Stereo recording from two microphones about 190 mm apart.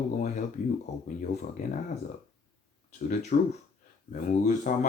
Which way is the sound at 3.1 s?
40° left (ahead or behind).